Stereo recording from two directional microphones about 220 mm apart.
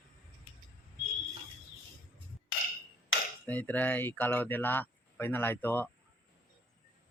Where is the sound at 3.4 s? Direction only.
5° left (ahead or behind).